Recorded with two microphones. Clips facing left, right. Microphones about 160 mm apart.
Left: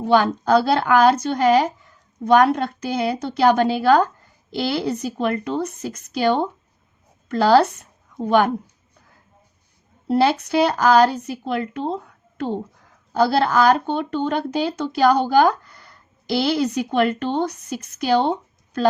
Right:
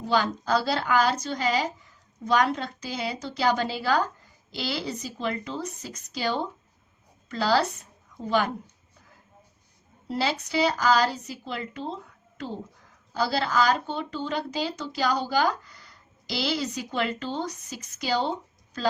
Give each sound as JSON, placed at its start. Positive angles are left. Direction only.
{"t": 0.0, "sound": "speech", "side_deg": 60}
{"t": 10.1, "sound": "speech", "side_deg": 60}
{"t": 13.1, "sound": "speech", "side_deg": 60}